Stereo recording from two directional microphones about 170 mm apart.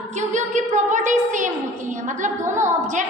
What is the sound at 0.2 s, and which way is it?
A woman's voice, 45° right (ahead or behind).